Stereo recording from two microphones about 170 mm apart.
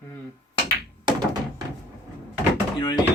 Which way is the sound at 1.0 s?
25° right (ahead or behind).